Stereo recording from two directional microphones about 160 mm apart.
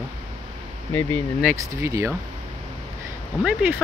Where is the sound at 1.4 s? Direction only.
15° right (ahead or behind).